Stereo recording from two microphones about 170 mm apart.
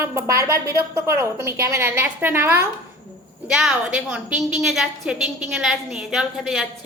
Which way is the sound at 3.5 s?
5° right (ahead or behind).